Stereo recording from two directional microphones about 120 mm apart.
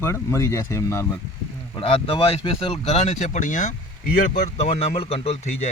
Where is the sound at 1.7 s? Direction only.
50° left (ahead or behind).